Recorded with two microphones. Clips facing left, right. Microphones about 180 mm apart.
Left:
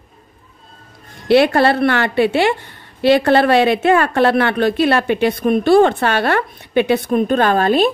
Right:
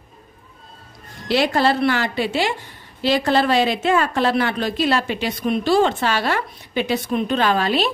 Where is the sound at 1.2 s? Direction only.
60° left (ahead or behind).